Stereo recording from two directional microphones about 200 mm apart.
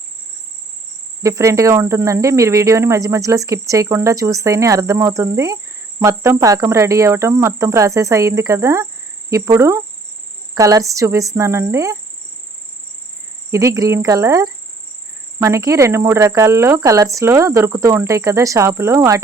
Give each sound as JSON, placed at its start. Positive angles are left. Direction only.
{"t": 1.2, "sound": "speech", "side_deg": -15}
{"t": 13.5, "sound": "speech", "side_deg": -15}